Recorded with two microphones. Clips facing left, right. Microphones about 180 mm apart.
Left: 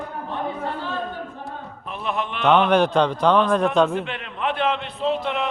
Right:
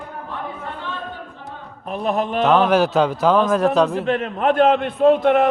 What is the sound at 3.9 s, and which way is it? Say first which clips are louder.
A man's voice: right 7 dB; 40° right (ahead or behind).